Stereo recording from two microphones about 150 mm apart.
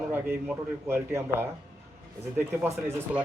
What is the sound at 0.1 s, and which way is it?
A man's voice, 15° right (ahead or behind).